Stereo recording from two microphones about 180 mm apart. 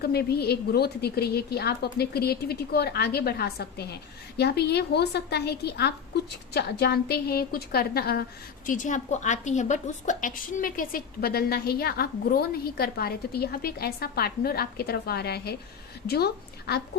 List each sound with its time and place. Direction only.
0.0 s a woman's voice: 60° left (ahead or behind)